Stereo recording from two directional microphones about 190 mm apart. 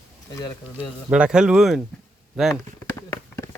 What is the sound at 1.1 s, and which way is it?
Speech, 5° right (ahead or behind).